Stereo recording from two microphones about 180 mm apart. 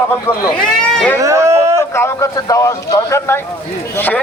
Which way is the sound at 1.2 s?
15° right (ahead or behind).